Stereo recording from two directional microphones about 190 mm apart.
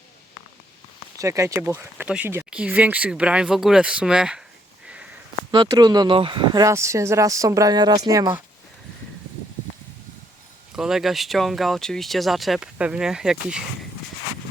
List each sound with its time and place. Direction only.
1.2 s speech: 15° right (ahead or behind)
5.5 s speech: 25° right (ahead or behind)
10.8 s speech: centre (ahead or behind)